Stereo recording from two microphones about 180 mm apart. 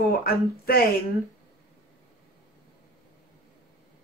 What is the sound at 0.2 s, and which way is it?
Speech, 55° left (ahead or behind).